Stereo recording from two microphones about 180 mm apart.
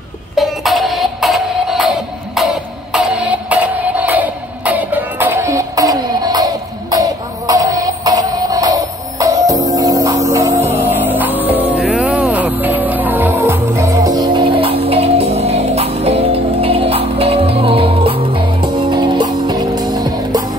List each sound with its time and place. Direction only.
0.4 s music: centre (ahead or behind); by 20.4 s 20° right (ahead or behind)